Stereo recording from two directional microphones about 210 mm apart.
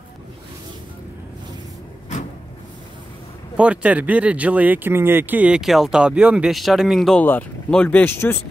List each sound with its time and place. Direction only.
3.5 s speech: 5° right (ahead or behind); by 8.5 s 10° left (ahead or behind)